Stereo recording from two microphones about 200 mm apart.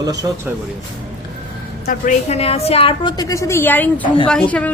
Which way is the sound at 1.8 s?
40° left (ahead or behind).